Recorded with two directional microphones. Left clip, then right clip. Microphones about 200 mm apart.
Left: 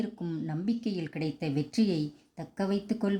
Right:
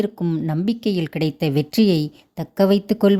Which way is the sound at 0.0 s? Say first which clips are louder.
Right 13 dB; 45° right (ahead or behind).